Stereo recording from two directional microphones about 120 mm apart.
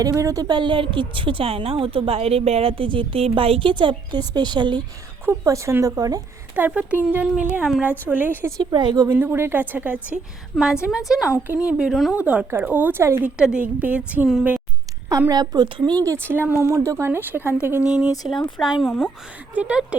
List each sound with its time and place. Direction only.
0.0 s a woman's voice: 25° right (ahead or behind)
5.2 s speech: 20° right (ahead or behind)
6.6 s speech: 10° right (ahead or behind)
8.7 s a woman's voice: 40° right (ahead or behind)
9.1 s speech: 20° right (ahead or behind)
11.4 s speech: 15° right (ahead or behind)
11.8 s speech: centre (ahead or behind)
12.1 s speech: 10° right (ahead or behind)
13.3 s speech: 10° right (ahead or behind)
15.3 s a woman's voice: 35° right (ahead or behind); by 19.0 s centre (ahead or behind)
19.5 s speech: 10° right (ahead or behind)